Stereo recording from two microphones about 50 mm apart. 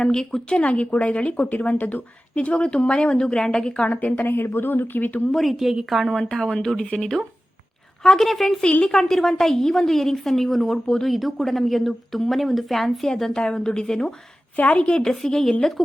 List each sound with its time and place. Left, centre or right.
0.0 s a woman's voice: centre
0.5 s speech: left
3.8 s speech: left
4.2 s speech: left
5.3 s speech: centre
6.3 s a woman's voice: centre
8.0 s a woman's voice: centre
11.1 s a woman's voice: centre
14.5 s speech: left
15.1 s a woman's voice: centre